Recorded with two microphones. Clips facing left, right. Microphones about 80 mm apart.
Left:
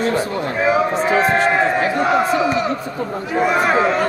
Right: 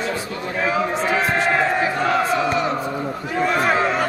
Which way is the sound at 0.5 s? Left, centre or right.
Centre.